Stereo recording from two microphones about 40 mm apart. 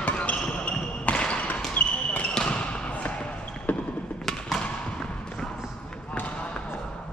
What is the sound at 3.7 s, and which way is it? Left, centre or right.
Basketball bounce, left.